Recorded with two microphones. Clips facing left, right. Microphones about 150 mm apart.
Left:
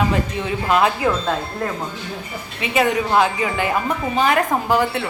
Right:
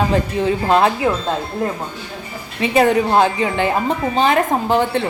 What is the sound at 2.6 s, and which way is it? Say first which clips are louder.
A woman's voice: right 5 dB; 35° right (ahead or behind).